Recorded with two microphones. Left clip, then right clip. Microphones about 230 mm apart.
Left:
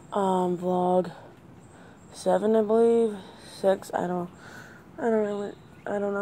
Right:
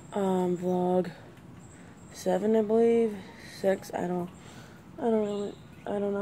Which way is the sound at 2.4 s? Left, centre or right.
Centre.